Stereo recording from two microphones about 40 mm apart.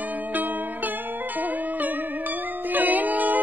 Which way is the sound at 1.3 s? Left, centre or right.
Right.